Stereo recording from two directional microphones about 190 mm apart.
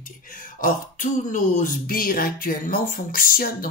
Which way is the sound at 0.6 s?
45° left (ahead or behind).